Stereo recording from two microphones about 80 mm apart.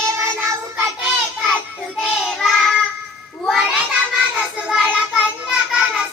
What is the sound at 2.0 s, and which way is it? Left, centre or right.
Child singing, centre.